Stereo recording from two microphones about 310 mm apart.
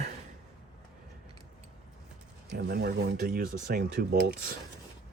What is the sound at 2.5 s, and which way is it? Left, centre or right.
Speech, right.